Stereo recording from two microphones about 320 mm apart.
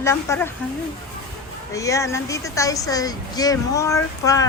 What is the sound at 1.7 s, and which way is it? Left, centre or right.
Speech, centre.